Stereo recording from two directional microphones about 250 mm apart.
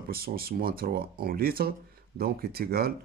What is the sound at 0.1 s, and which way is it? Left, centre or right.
Speech, right.